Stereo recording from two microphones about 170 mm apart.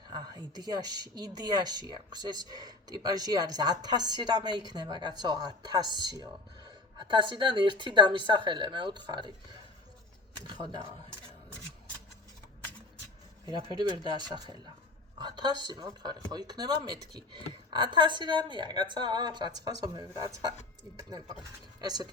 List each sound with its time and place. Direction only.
0.1 s speech: 25° right (ahead or behind)
10.4 s speech: 25° right (ahead or behind)
13.6 s speech: 25° right (ahead or behind)